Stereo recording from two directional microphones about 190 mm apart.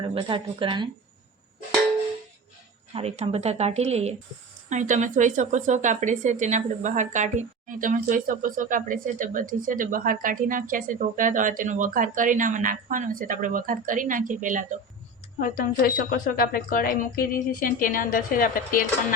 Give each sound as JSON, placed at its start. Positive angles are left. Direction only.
{"t": 0.0, "sound": "speech", "side_deg": -30}
{"t": 2.9, "sound": "speech", "side_deg": -35}
{"t": 15.4, "sound": "speech", "side_deg": 45}